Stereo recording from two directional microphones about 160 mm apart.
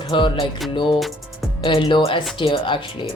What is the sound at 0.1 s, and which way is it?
Speech, 30° left (ahead or behind).